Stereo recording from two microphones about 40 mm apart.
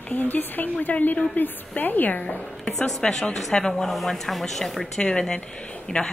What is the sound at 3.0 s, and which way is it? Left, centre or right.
A woman's voice, left.